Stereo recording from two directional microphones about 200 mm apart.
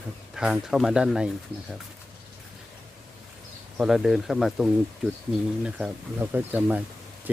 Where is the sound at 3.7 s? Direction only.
Centre (ahead or behind).